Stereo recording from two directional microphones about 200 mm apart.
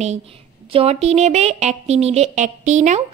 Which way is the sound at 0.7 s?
30° right (ahead or behind).